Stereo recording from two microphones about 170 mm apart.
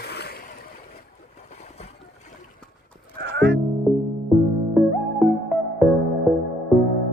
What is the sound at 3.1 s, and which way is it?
Music, 75° right (ahead or behind).